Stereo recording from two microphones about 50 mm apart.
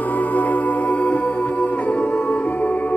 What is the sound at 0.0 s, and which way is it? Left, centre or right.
Music, left.